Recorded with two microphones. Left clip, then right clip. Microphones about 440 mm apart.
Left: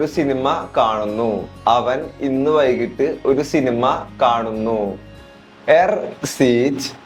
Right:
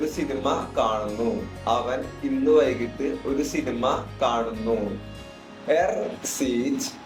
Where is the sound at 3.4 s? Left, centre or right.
Left.